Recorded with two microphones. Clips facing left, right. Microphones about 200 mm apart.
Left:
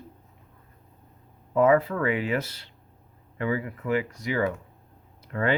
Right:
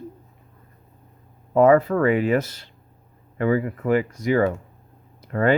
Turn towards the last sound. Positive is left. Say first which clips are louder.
# right 6 dB
turn(degrees=-45)  # may be behind; listen again after turning